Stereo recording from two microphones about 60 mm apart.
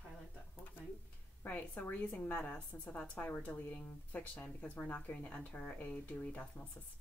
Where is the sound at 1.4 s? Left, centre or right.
Left.